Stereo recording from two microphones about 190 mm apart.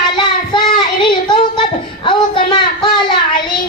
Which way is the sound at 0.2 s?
25° left (ahead or behind).